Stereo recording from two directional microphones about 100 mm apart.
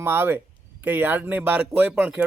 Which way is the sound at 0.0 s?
20° right (ahead or behind).